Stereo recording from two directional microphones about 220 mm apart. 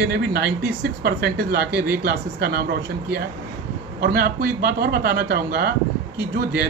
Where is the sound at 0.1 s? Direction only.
45° right (ahead or behind).